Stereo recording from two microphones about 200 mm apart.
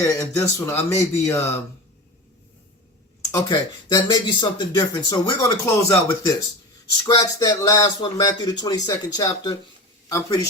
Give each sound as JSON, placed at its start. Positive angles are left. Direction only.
{"t": 0.0, "sound": "speech", "side_deg": 15}
{"t": 3.3, "sound": "speech", "side_deg": 20}